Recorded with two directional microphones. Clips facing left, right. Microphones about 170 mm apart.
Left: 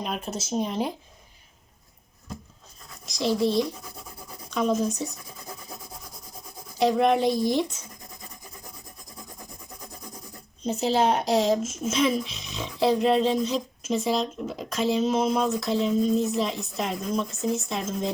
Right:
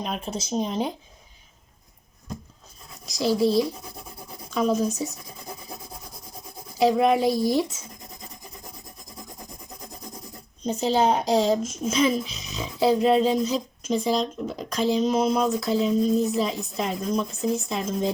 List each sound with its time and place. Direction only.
0.0 s speech: 5° left (ahead or behind)
3.1 s speech: centre (ahead or behind)
6.7 s speech: 5° right (ahead or behind)
10.7 s speech: centre (ahead or behind)